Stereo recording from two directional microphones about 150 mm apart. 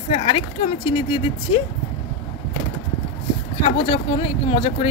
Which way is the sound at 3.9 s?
35° left (ahead or behind).